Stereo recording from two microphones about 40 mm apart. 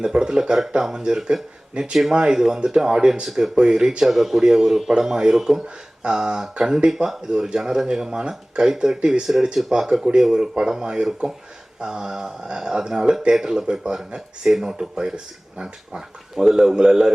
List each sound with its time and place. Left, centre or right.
0.0 s speech: centre
3.5 s speech: centre
4.0 s a man's voice: centre
5.6 s a sound: right
6.4 s speech: centre
14.4 s speech: centre